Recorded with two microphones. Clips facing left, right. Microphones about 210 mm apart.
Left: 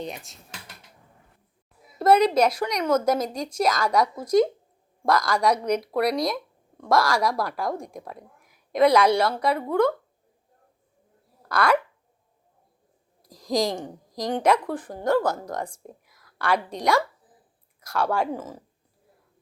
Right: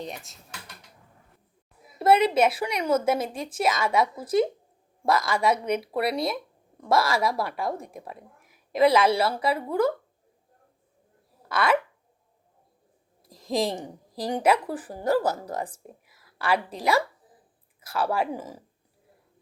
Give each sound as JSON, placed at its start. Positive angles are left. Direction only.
{"t": 0.0, "sound": "a woman's voice", "side_deg": 0}
{"t": 2.0, "sound": "a woman's voice", "side_deg": -5}
{"t": 11.4, "sound": "speech", "side_deg": 0}
{"t": 13.2, "sound": "a woman's voice", "side_deg": 0}